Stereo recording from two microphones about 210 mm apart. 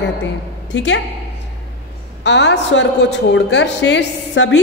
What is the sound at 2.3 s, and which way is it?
A woman's voice, 55° left (ahead or behind).